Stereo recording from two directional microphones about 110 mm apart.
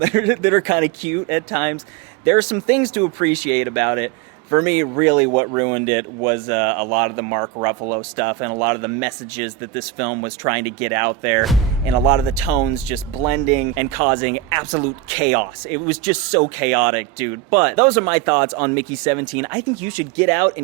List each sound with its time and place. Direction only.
0.0 s speech: 20° right (ahead or behind)
12.9 s speech: 20° right (ahead or behind)